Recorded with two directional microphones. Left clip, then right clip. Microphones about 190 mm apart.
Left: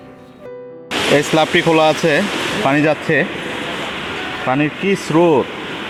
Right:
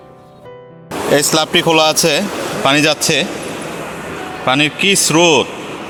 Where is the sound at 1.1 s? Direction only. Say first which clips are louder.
Right 1 dB; 10° right (ahead or behind).